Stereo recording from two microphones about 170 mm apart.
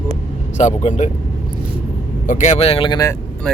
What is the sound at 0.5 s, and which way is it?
Speech, 45° left (ahead or behind).